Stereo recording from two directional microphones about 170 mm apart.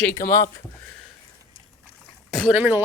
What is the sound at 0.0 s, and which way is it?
Speech, 15° left (ahead or behind).